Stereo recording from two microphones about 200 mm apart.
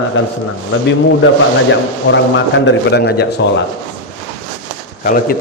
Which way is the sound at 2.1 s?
65° left (ahead or behind).